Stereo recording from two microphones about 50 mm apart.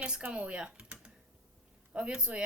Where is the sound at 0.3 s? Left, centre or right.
Right.